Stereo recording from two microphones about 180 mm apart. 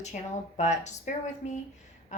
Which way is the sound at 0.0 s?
40° left (ahead or behind).